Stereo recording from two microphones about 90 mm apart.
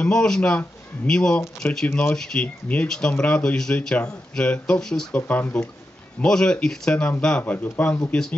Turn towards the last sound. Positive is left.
turn(degrees=15)  # may be behind; listen again after turning